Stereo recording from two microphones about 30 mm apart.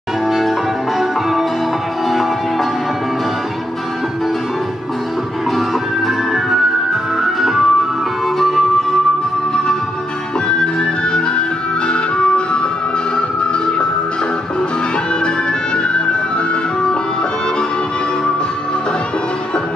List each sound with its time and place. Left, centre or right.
6.0 s music: centre
10.6 s music: left